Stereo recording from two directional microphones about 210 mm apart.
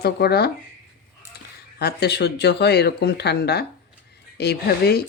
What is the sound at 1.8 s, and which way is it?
Speech, 50° left (ahead or behind).